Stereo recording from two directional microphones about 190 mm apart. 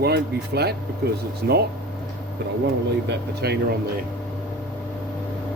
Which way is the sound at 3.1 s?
60° right (ahead or behind).